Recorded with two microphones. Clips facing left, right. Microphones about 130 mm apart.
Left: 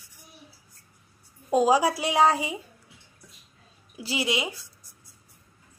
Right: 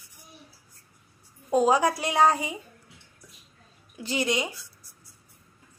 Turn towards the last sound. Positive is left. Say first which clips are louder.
# right 1 dB
turn(degrees=10)  # may be behind; listen again after turning